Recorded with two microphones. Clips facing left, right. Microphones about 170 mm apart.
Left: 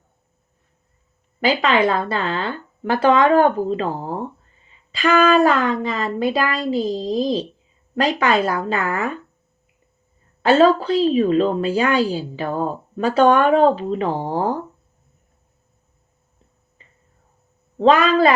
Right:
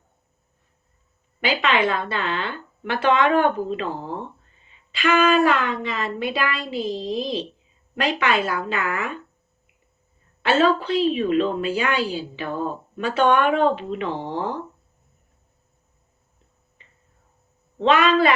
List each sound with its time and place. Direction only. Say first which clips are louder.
1.4 s a woman's voice: left 4 dB; 40° left (ahead or behind)
10.4 s a woman's voice: left 5 dB; 40° left (ahead or behind)
17.7 s a woman's voice: left 3 dB; 40° left (ahead or behind)